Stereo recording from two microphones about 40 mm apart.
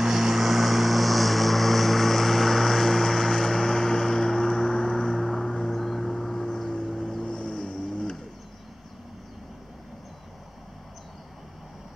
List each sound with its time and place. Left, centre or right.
0.0 s vehicle: centre
7.2 s vehicle: left